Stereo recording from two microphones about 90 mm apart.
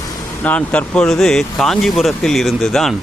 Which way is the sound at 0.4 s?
15° left (ahead or behind).